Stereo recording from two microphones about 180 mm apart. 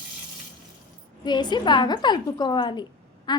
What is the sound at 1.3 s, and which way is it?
A woman's voice, 25° left (ahead or behind).